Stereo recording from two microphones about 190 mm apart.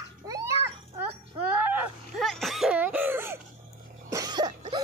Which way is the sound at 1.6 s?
10° right (ahead or behind).